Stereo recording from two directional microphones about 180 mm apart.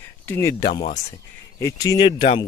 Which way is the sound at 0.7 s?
40° left (ahead or behind).